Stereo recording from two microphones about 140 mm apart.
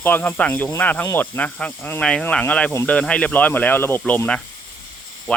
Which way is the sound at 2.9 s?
10° left (ahead or behind).